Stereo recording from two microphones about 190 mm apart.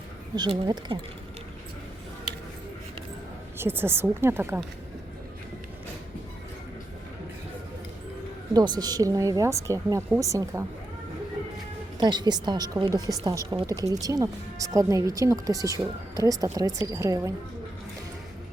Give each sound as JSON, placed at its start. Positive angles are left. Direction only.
{"t": 0.3, "sound": "a woman's voice", "side_deg": -20}
{"t": 3.6, "sound": "speech", "side_deg": -10}
{"t": 8.5, "sound": "a woman's voice", "side_deg": -20}
{"t": 11.9, "sound": "a woman's voice", "side_deg": -25}